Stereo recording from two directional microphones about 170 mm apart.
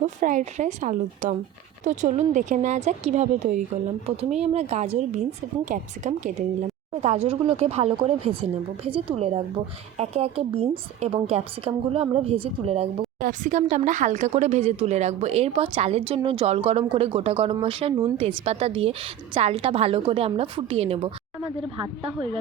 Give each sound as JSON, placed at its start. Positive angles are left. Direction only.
{"t": 0.0, "sound": "speech", "side_deg": -45}
{"t": 13.1, "sound": "speech", "side_deg": -50}